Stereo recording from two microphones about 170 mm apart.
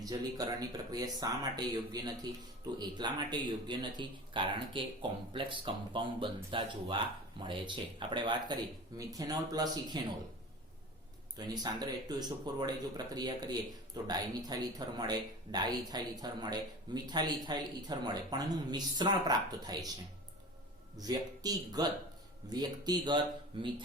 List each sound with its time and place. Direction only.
0.0 s a man's voice: 25° right (ahead or behind)
11.3 s a man's voice: 25° right (ahead or behind)
20.9 s a man's voice: 20° right (ahead or behind)